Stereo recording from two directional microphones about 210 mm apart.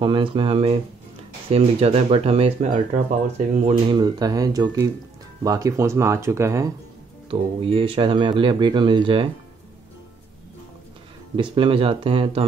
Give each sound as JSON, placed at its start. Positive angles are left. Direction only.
{"t": 0.0, "sound": "speech", "side_deg": -25}
{"t": 3.9, "sound": "speech", "side_deg": -20}
{"t": 7.2, "sound": "speech", "side_deg": -25}
{"t": 11.3, "sound": "speech", "side_deg": -25}